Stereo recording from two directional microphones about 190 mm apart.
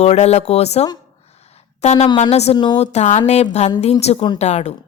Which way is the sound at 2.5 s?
20° left (ahead or behind).